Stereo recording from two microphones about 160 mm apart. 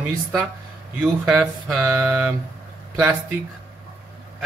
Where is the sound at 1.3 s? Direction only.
20° right (ahead or behind).